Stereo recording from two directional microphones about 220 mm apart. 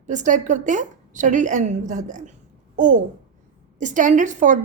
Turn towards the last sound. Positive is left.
turn(degrees=-35)  # may be behind; listen again after turning